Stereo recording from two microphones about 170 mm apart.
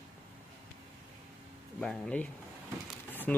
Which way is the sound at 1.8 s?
5° left (ahead or behind).